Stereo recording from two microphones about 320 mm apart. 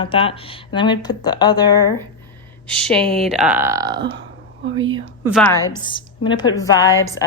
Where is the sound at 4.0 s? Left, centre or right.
Right.